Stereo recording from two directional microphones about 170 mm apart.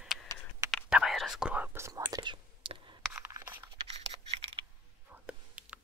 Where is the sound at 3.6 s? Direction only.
35° right (ahead or behind).